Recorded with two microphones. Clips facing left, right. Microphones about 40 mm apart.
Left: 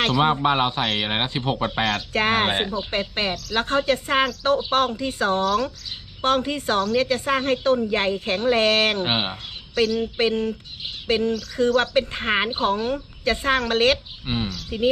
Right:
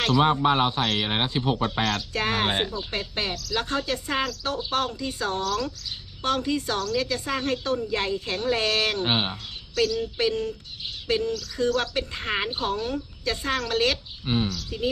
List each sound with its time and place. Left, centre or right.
0.0 s speech: left
14.3 s speech: left